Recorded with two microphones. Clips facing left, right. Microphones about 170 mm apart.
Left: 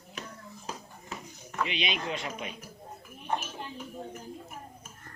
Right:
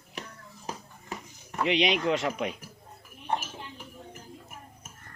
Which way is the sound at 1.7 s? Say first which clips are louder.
Right 13 dB; 85° right.